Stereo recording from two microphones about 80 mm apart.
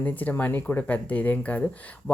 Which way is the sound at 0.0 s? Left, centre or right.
Left.